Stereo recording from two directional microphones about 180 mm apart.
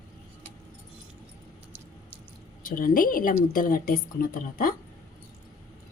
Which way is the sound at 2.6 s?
50° left (ahead or behind).